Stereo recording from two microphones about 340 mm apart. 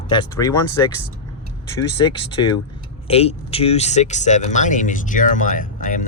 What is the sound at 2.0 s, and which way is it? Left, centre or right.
Speech, centre.